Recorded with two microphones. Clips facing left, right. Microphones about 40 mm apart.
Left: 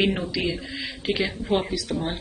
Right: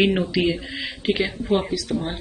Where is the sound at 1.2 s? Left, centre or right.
Centre.